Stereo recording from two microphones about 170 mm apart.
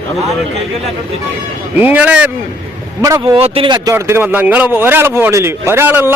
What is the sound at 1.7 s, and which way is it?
Speech, 10° right (ahead or behind).